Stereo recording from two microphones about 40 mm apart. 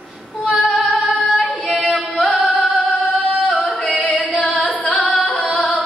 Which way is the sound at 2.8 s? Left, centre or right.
Left.